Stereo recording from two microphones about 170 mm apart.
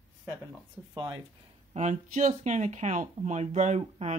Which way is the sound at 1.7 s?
45° right (ahead or behind).